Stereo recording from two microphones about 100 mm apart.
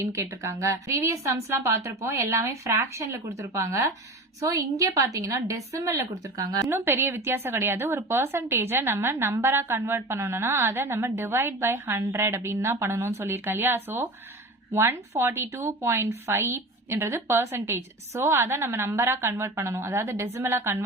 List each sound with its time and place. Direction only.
0.0 s a woman's voice: 30° right (ahead or behind)
6.7 s speech: 25° right (ahead or behind)